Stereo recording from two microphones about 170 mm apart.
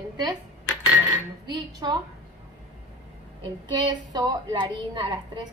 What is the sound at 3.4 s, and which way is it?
A woman's voice, 30° right (ahead or behind).